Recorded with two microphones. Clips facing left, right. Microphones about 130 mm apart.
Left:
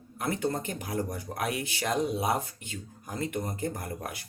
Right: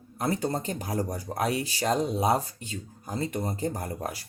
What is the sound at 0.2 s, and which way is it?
Speech, 35° right (ahead or behind).